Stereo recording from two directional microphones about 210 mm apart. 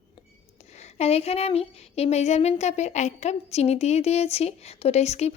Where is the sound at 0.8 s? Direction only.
30° left (ahead or behind).